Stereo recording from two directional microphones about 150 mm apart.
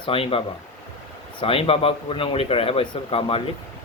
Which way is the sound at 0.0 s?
35° left (ahead or behind).